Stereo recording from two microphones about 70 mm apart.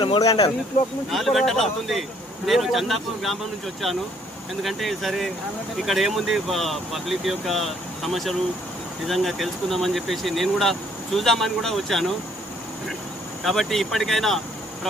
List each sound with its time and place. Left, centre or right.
0.2 s speech: left
1.1 s speech: centre
4.6 s speech: centre
13.4 s speech: centre